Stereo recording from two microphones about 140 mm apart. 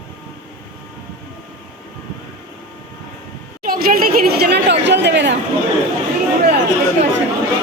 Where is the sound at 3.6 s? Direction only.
90° right.